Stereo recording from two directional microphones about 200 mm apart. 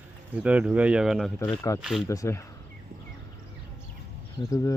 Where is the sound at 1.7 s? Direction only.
15° left (ahead or behind).